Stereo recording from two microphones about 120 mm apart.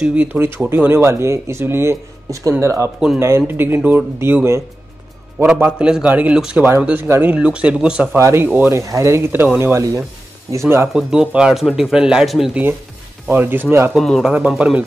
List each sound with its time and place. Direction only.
0.0 s speech: 15° right (ahead or behind)
5.4 s speech: 10° right (ahead or behind)
8.2 s speech: 20° right (ahead or behind)
10.9 s speech: 5° right (ahead or behind)
13.3 s speech: 15° right (ahead or behind)
13.9 s speech: centre (ahead or behind)
14.6 s speech: 10° right (ahead or behind)